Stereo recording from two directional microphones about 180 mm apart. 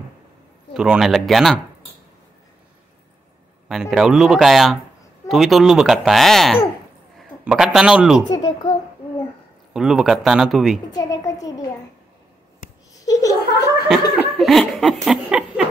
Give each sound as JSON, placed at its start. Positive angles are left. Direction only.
{"t": 0.7, "sound": "speech", "side_deg": -5}
{"t": 3.6, "sound": "speech", "side_deg": 0}
{"t": 8.3, "sound": "a child's voice", "side_deg": 25}
{"t": 9.8, "sound": "speech", "side_deg": -5}
{"t": 10.9, "sound": "a woman's voice", "side_deg": 20}
{"t": 12.9, "sound": "a sound", "side_deg": 20}
{"t": 14.1, "sound": "laughter", "side_deg": 0}